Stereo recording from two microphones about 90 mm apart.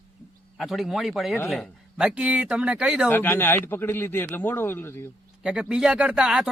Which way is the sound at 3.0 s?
25° left (ahead or behind).